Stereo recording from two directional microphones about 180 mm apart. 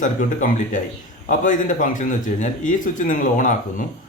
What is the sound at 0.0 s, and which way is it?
Speech, 45° left (ahead or behind).